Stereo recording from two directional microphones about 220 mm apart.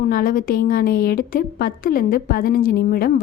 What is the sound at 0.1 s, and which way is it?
A woman's voice, 40° left (ahead or behind).